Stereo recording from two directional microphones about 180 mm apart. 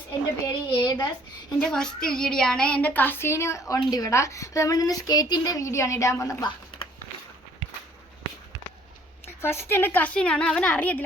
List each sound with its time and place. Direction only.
0.4 s a sound: 20° left (ahead or behind)
1.5 s a woman's voice: 5° left (ahead or behind)
9.2 s a woman's voice: 15° left (ahead or behind)